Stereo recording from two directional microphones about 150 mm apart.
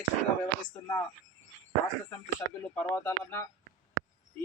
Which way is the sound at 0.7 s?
15° left (ahead or behind).